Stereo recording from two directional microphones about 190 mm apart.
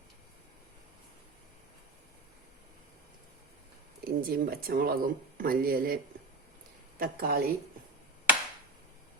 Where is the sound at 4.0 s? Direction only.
50° right (ahead or behind).